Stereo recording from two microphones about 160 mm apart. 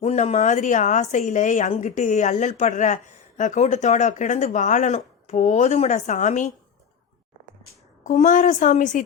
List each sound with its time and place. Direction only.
0.0 s a woman's voice: 40° left (ahead or behind)
8.0 s a woman's voice: 55° left (ahead or behind)